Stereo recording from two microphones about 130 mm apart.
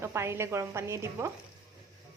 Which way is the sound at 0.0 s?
20° right (ahead or behind).